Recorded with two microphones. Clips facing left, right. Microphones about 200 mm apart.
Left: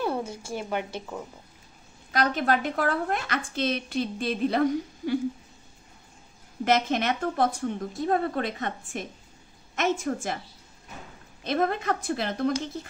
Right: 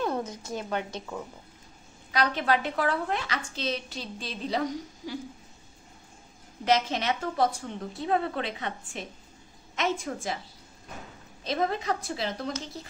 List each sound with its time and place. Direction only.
0.0 s a sound: 10° left (ahead or behind)
0.5 s a woman's voice: 10° left (ahead or behind)
2.1 s a woman's voice: 50° left (ahead or behind)
6.6 s a woman's voice: 55° left (ahead or behind)
11.4 s a woman's voice: 55° left (ahead or behind)